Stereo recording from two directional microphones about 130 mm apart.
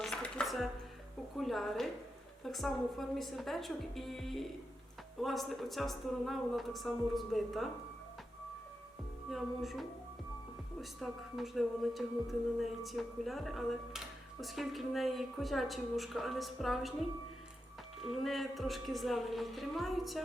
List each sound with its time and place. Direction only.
0.0 s dishes: 5° left (ahead or behind)
1.4 s speech: centre (ahead or behind)
9.3 s speech: centre (ahead or behind)
18.2 s speech: centre (ahead or behind)